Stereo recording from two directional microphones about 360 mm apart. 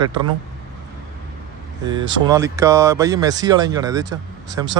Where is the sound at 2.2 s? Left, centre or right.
Centre.